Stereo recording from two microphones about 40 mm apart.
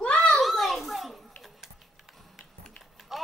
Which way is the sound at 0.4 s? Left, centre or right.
Centre.